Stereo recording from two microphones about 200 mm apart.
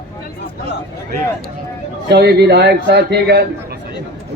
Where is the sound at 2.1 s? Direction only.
55° right (ahead or behind).